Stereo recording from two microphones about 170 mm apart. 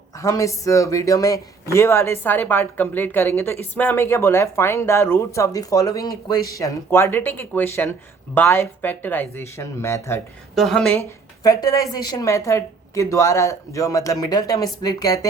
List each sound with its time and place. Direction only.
0.2 s speech: 20° left (ahead or behind)
10.5 s speech: centre (ahead or behind)
11.4 s a woman's voice: 20° left (ahead or behind)